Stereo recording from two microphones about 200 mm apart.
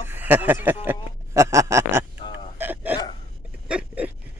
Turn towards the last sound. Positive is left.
turn(degrees=-5)  # may be behind; listen again after turning